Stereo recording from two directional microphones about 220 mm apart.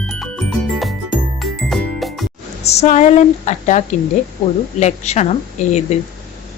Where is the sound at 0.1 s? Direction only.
Centre (ahead or behind).